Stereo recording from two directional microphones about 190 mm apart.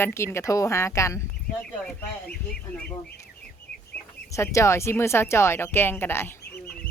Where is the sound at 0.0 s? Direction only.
10° left (ahead or behind).